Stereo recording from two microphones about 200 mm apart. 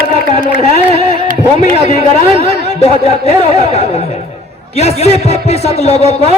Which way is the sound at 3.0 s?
30° left (ahead or behind).